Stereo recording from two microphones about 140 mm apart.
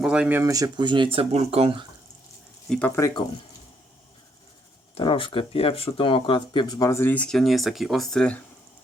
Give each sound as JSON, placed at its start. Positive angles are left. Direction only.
{"t": 0.0, "sound": "speech", "side_deg": -5}
{"t": 2.6, "sound": "speech", "side_deg": 5}
{"t": 4.9, "sound": "speech", "side_deg": 40}